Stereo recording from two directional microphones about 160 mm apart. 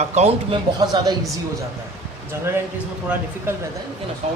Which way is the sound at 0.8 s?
25° right (ahead or behind).